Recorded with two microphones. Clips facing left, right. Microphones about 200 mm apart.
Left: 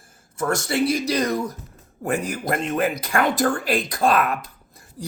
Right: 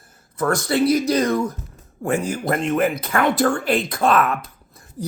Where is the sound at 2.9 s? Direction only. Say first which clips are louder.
Right 2 dB; 35° left (ahead or behind).